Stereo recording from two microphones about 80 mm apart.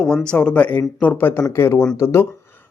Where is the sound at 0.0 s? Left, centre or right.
Centre.